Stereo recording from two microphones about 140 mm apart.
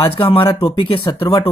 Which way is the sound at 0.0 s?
40° left (ahead or behind).